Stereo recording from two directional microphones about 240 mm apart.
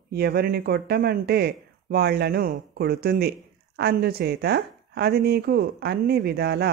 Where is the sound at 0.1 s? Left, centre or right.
Right.